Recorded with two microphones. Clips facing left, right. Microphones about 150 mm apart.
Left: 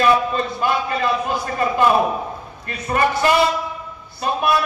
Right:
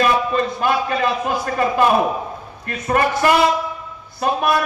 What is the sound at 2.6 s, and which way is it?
A man's voice, 55° right (ahead or behind).